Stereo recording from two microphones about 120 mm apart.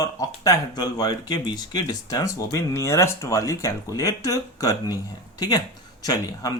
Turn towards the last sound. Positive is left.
turn(degrees=30)  # may be behind; listen again after turning